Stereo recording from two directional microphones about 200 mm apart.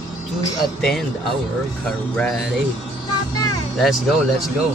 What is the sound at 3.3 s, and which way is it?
Music, 20° left (ahead or behind).